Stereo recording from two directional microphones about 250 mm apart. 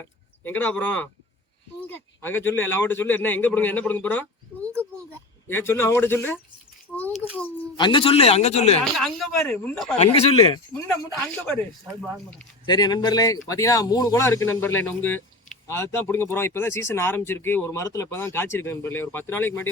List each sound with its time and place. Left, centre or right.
0.0 s speech: centre
5.5 s speech: centre
7.8 s a man's voice: centre
8.8 s speech: centre
10.1 s a man's voice: left
11.1 s speech: centre
12.6 s speech: centre